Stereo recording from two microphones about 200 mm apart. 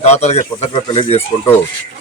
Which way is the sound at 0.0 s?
35° left (ahead or behind).